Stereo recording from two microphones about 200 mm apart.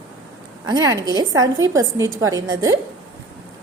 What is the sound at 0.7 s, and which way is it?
A woman's voice, 20° right (ahead or behind).